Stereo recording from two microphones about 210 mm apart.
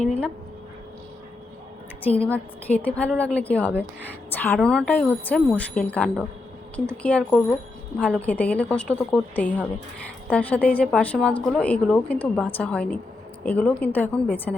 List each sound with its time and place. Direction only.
2.3 s a woman's voice: 5° left (ahead or behind)